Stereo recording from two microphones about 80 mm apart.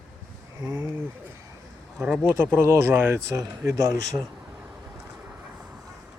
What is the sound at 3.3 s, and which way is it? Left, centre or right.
Speech, right.